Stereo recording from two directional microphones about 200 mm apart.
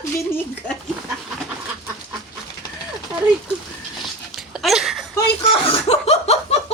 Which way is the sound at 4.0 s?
Centre (ahead or behind).